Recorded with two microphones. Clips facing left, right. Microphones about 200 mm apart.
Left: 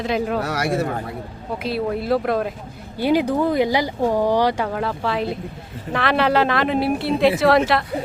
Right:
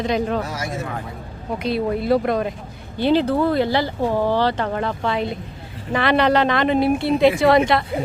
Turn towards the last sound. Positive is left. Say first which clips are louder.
# right 1 dB
turn(degrees=0)  # may be behind; listen again after turning